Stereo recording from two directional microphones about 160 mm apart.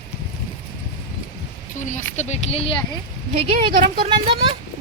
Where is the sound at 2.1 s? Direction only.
45° left (ahead or behind).